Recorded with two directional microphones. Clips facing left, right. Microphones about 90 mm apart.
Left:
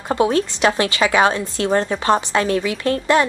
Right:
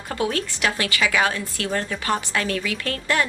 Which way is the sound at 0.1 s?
25° left (ahead or behind).